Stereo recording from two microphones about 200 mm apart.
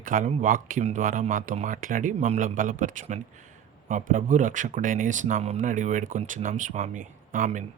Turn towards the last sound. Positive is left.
turn(degrees=-40)  # may be behind; listen again after turning